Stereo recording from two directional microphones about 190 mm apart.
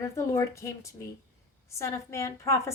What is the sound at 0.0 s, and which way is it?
A woman's voice, 15° left (ahead or behind).